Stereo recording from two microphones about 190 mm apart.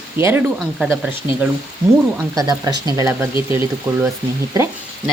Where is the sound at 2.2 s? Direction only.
20° right (ahead or behind).